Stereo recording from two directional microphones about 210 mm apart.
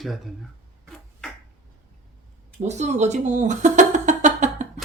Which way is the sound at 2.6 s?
35° right (ahead or behind).